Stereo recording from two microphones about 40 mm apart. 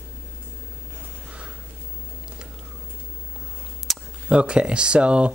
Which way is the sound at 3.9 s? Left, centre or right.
Centre.